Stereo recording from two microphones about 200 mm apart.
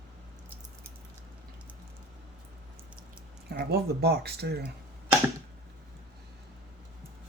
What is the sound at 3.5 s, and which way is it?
Speech, 55° right (ahead or behind).